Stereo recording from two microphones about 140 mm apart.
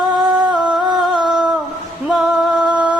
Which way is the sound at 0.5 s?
30° right (ahead or behind).